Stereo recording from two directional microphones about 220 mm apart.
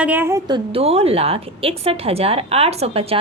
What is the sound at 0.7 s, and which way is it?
A woman's voice, 25° right (ahead or behind).